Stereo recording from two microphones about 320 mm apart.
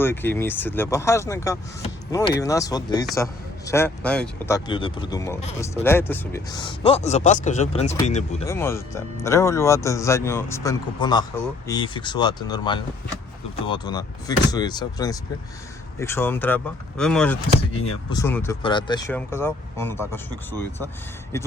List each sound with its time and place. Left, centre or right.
0.0 s speech: centre
8.4 s speech: centre